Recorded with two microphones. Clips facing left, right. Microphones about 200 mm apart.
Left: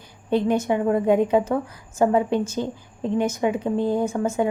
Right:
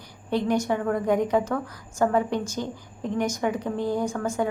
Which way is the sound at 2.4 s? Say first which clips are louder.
Left 4 dB; 15° right (ahead or behind).